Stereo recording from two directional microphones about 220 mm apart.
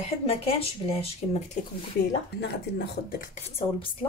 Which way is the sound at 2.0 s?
45° left (ahead or behind).